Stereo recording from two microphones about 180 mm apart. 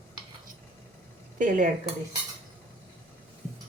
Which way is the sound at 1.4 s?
45° right (ahead or behind).